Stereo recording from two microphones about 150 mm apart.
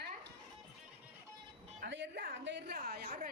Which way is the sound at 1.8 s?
85° right.